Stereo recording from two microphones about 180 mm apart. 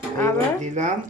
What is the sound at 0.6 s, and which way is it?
Speech, 40° right (ahead or behind).